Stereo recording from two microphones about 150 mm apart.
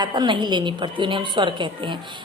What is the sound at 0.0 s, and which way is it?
A woman's voice, 30° right (ahead or behind).